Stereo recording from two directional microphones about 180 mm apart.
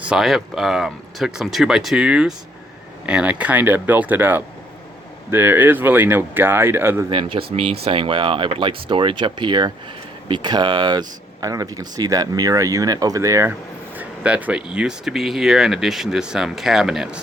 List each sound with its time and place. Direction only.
0.0 s speech: 5° right (ahead or behind)
7.1 s speech: 30° right (ahead or behind); by 17.2 s 5° right (ahead or behind)